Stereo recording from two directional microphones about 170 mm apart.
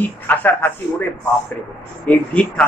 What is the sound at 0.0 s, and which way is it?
Mantra, 10° left (ahead or behind).